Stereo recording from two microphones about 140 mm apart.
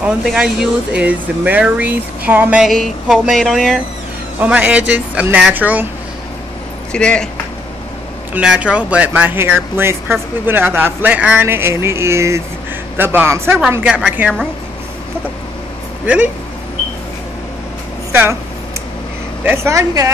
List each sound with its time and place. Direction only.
0.0 s speech: 5° right (ahead or behind)
2.7 s speech: centre (ahead or behind)
6.9 s speech: 5° left (ahead or behind)
8.3 s speech: 10° right (ahead or behind)
16.1 s speech: 10° right (ahead or behind)
19.4 s a woman's voice: 20° right (ahead or behind)